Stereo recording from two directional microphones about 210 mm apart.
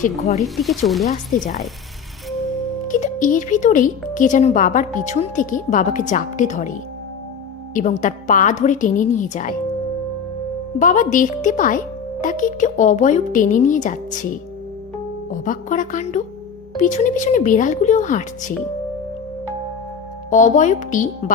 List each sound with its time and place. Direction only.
0.0 s speech: 30° left (ahead or behind)
0.4 s speech: centre (ahead or behind)
1.0 s speech: 35° left (ahead or behind)
2.8 s speech: 40° left (ahead or behind)
10.8 s speech: 40° left (ahead or behind)
15.3 s speech: 35° left (ahead or behind)
20.3 s speech: 35° left (ahead or behind)